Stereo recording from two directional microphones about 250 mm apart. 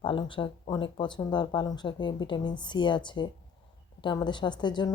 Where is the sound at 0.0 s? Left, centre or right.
Centre.